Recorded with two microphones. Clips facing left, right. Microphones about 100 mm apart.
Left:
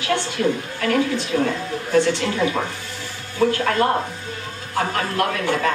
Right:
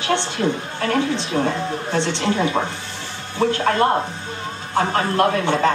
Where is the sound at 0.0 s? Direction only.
25° right (ahead or behind).